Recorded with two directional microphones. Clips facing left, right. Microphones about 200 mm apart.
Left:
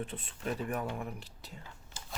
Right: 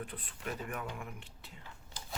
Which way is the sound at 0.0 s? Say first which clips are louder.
Left 4 dB; 25° left (ahead or behind).